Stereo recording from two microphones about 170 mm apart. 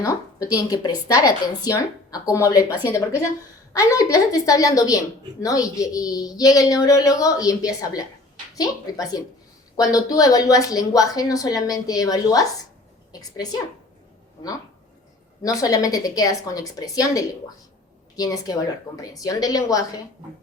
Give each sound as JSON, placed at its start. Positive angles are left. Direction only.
{"t": 0.0, "sound": "a woman's voice", "side_deg": 20}
{"t": 3.7, "sound": "a woman's voice", "side_deg": 20}
{"t": 15.4, "sound": "a woman's voice", "side_deg": 20}